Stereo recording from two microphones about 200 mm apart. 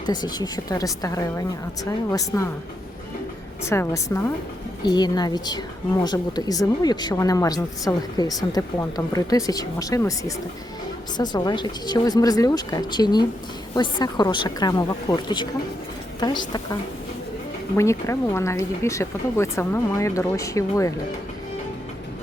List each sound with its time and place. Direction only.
0.0 s speech: 20° left (ahead or behind)
3.6 s a woman's voice: 15° left (ahead or behind)
17.7 s speech: 15° left (ahead or behind)